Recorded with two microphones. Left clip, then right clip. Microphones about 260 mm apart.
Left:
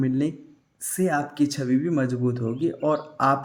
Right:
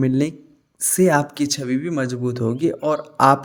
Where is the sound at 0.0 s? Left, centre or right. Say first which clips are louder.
Right 5 dB; right.